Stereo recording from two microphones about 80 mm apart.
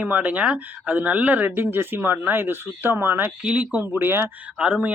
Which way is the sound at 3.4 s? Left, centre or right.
Centre.